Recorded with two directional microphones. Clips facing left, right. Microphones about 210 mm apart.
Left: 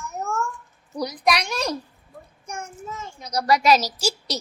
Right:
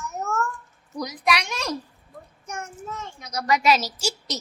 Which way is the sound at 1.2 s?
35° left (ahead or behind).